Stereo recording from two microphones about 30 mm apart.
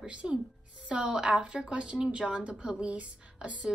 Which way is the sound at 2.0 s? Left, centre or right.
Right.